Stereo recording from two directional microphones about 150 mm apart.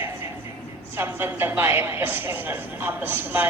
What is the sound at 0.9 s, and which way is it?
A woman's voice, 15° right (ahead or behind).